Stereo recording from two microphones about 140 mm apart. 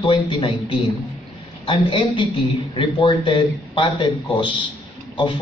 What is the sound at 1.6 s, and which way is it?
Speech, 35° left (ahead or behind).